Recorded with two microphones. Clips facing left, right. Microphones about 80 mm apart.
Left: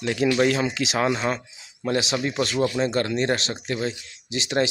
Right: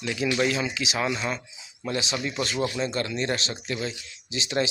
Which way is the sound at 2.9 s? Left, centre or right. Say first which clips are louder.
Left 5 dB; left.